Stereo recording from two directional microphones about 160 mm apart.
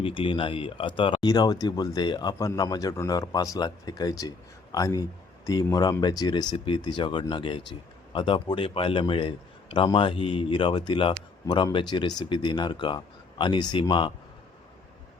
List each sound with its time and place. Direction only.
0.0 s speech: 35° left (ahead or behind)